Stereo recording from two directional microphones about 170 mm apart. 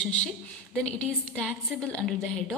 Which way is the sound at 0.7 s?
5° left (ahead or behind).